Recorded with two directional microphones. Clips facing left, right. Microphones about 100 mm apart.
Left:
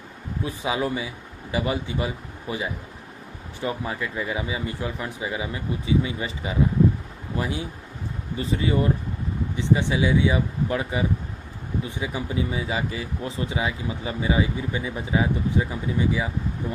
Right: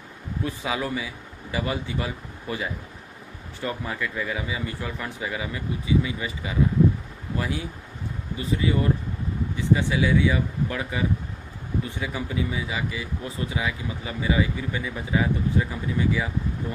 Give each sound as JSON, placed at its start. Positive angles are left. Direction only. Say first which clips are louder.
{"t": 0.4, "sound": "speech", "louder": "left 2 dB", "side_deg": 20}
{"t": 3.6, "sound": "speech", "louder": "left 1 dB", "side_deg": 20}